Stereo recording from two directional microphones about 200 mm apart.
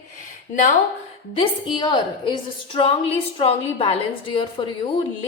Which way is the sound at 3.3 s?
30° left (ahead or behind).